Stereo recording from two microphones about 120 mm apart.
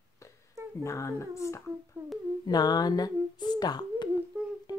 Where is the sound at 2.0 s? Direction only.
20° right (ahead or behind).